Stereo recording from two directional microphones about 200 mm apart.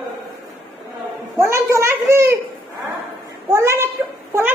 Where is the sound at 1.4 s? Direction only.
15° right (ahead or behind).